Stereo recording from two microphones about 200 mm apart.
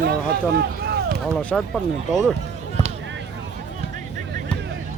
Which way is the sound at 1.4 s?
5° left (ahead or behind).